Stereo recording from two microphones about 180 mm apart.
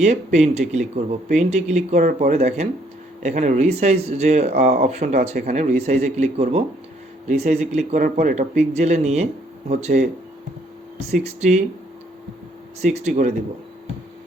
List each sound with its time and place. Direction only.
0.0 s speech: 40° right (ahead or behind)
11.1 s speech: 40° right (ahead or behind)
12.8 s speech: 40° right (ahead or behind)